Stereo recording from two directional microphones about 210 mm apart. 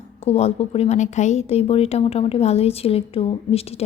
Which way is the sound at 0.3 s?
30° left (ahead or behind).